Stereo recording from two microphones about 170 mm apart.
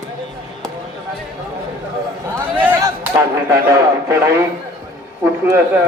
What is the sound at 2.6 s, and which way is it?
Speech, 10° right (ahead or behind).